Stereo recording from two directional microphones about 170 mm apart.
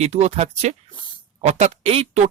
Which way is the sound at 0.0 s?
40° right (ahead or behind).